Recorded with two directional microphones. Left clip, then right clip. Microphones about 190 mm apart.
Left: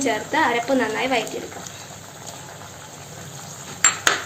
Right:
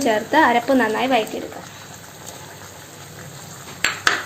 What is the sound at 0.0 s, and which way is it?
Speech, 45° right (ahead or behind).